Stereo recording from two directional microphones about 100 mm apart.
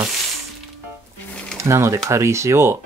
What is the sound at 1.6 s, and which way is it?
Speech, 30° right (ahead or behind).